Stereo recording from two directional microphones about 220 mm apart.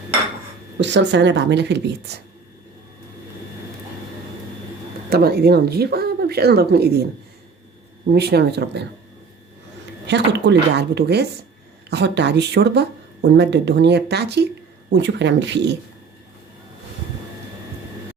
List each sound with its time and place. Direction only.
0.8 s speech: 55° right (ahead or behind)
5.0 s speech: 45° right (ahead or behind)
8.1 s speech: 50° right (ahead or behind)
10.1 s speech: 50° right (ahead or behind)